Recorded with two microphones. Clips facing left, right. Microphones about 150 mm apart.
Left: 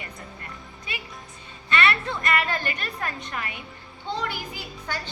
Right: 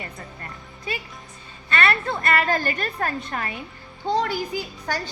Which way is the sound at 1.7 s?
40° right (ahead or behind).